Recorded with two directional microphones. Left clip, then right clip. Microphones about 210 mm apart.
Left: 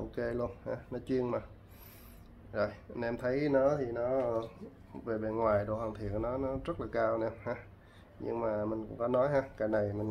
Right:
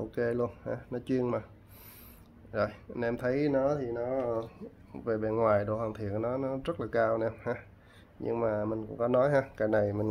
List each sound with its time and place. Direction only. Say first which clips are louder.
0.1 s speech: right 5 dB; 25° right (ahead or behind)
2.5 s speech: right 2 dB; 30° right (ahead or behind)
5.0 s speech: right 4 dB; 40° right (ahead or behind)